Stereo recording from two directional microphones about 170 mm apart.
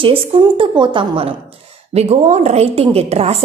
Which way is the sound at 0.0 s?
30° right (ahead or behind).